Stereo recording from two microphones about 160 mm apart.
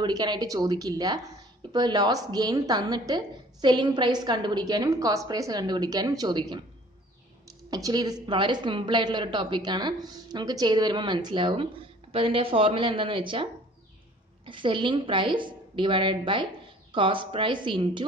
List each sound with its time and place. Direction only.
0.0 s a woman's voice: 25° right (ahead or behind)